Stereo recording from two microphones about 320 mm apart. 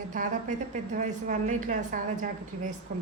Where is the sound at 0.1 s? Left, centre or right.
Right.